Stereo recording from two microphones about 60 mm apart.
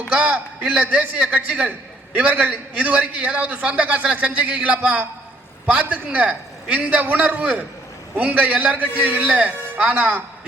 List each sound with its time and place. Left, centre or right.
0.1 s a man's voice: right